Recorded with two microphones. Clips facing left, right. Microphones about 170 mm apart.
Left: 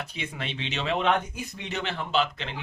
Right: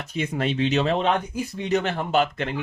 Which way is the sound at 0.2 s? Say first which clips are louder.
Right 14 dB; 45° right (ahead or behind).